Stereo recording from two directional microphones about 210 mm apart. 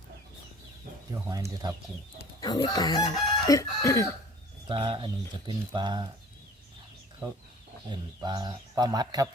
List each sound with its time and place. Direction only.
1.1 s speech: 15° right (ahead or behind)
2.1 s speech: 25° left (ahead or behind)
4.6 s a man's voice: 20° right (ahead or behind)
7.9 s a man's voice: 20° right (ahead or behind)